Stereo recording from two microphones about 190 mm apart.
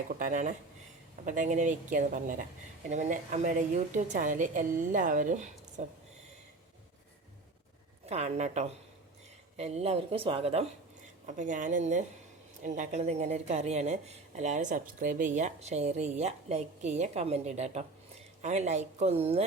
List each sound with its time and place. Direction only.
0.2 s a woman's voice: 40° right (ahead or behind)
8.0 s speech: 35° right (ahead or behind)